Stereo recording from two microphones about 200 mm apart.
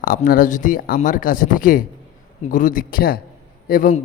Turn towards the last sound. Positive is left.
turn(degrees=45)  # may be behind; listen again after turning